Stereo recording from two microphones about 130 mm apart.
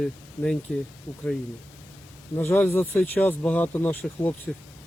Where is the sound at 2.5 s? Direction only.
15° left (ahead or behind).